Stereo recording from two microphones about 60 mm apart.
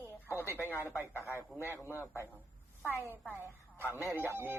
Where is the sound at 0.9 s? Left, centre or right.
Right.